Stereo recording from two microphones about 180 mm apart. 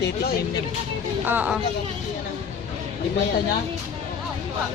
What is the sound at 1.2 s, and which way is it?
Speech, 10° right (ahead or behind).